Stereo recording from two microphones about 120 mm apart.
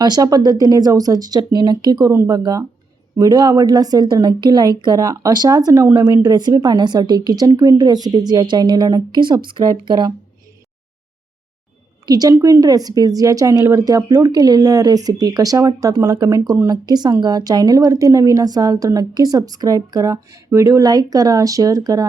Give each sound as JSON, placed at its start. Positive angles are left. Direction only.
{"t": 0.0, "sound": "a woman's voice", "side_deg": -35}
{"t": 12.0, "sound": "a woman's voice", "side_deg": -30}